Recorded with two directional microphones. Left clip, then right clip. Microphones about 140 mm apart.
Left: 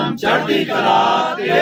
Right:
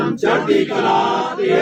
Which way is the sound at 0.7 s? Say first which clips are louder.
Left 2 dB; 10° left (ahead or behind).